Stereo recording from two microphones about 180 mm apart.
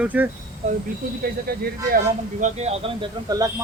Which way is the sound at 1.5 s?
60° right (ahead or behind).